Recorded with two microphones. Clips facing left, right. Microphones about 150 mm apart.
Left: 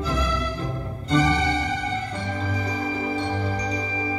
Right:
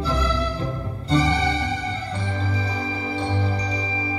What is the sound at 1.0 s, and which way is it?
Music, 30° right (ahead or behind).